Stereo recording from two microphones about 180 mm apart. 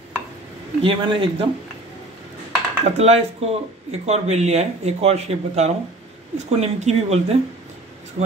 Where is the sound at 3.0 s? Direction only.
35° right (ahead or behind).